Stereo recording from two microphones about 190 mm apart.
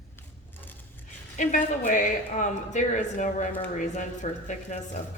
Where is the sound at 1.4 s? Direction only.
40° left (ahead or behind).